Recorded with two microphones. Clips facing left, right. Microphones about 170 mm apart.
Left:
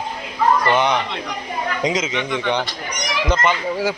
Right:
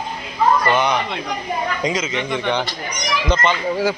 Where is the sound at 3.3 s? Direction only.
10° left (ahead or behind).